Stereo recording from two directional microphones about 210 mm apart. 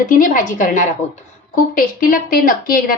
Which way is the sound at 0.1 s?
40° left (ahead or behind).